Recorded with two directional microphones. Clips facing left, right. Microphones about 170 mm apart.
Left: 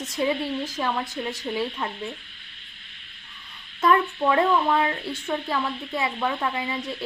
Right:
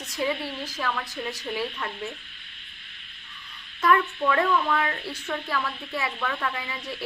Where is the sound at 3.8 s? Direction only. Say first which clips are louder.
Left 2 dB; 25° left (ahead or behind).